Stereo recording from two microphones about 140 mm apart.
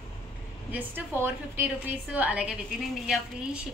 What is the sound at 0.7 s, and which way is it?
A woman's voice, 15° right (ahead or behind).